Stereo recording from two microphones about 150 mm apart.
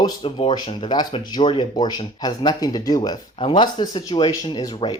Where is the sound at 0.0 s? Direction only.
35° left (ahead or behind).